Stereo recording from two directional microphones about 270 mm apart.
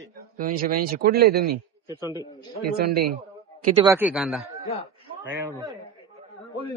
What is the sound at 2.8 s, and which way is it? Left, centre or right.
Speech, right.